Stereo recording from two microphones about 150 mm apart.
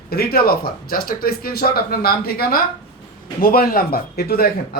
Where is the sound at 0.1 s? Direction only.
90° left.